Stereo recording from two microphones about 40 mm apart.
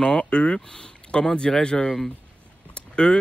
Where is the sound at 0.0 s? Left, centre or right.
Left.